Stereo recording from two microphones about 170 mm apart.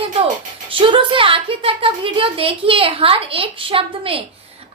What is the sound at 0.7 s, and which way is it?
Speech, 30° right (ahead or behind).